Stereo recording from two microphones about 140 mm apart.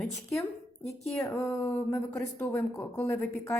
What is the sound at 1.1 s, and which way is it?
A woman's voice, 20° left (ahead or behind).